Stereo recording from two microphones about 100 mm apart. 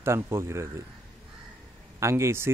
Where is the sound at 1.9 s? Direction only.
25° right (ahead or behind).